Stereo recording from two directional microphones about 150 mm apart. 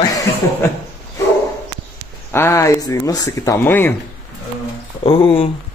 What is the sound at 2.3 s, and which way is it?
Speech, 15° left (ahead or behind).